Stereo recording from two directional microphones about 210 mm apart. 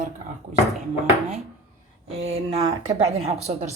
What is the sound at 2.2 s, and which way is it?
Speech, 30° right (ahead or behind).